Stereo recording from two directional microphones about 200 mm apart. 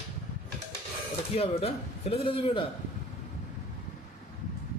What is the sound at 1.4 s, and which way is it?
A man's voice, 30° left (ahead or behind).